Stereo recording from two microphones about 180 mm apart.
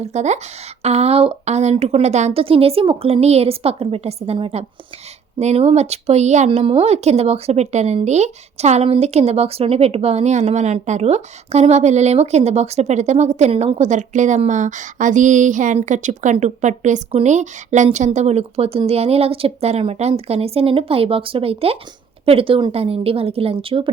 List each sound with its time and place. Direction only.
0.0 s speech: 40° right (ahead or behind)